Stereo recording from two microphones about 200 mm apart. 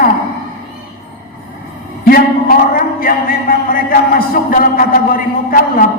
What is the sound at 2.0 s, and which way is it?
A man's voice, 45° left (ahead or behind).